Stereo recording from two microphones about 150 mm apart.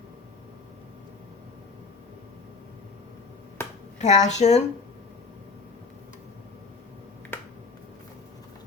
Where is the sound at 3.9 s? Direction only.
50° left (ahead or behind).